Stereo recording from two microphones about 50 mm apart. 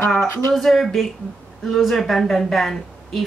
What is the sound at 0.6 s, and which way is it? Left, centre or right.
A woman's voice, centre.